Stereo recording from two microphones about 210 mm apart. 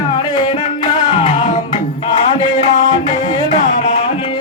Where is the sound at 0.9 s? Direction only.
20° left (ahead or behind).